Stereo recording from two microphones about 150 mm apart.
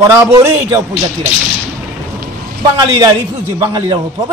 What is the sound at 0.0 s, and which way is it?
Speech, 20° right (ahead or behind).